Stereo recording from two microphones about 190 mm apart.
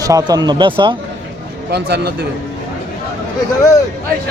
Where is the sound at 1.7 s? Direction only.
60° right (ahead or behind).